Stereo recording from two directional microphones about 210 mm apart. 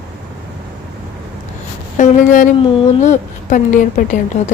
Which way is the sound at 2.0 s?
35° left (ahead or behind).